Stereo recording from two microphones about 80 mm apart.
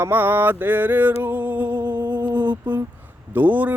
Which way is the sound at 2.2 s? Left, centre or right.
Right.